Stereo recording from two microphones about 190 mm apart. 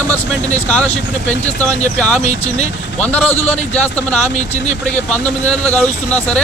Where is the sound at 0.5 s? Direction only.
5° left (ahead or behind).